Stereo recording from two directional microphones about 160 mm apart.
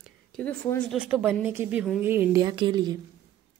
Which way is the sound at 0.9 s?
10° right (ahead or behind).